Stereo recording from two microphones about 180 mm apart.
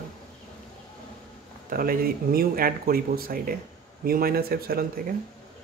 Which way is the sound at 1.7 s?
55° right (ahead or behind).